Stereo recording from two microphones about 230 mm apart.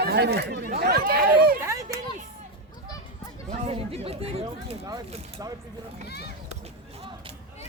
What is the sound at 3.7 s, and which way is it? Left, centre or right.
Speech, right.